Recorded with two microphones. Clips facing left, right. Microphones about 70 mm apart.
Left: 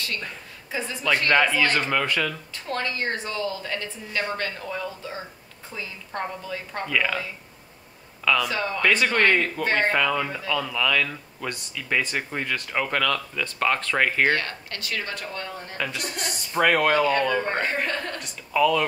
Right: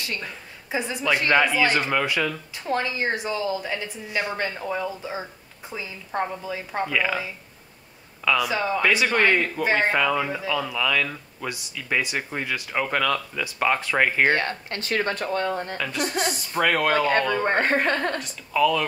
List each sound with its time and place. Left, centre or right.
0.7 s speech: centre
8.3 s speech: centre
14.3 s speech: right
15.8 s speech: centre
17.4 s speech: right
18.2 s speech: centre